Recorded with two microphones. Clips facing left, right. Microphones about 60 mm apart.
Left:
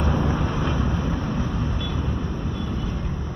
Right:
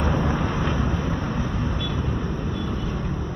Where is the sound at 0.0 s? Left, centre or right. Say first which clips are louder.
Even; centre.